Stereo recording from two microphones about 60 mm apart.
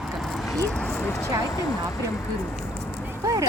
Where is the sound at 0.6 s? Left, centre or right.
Centre.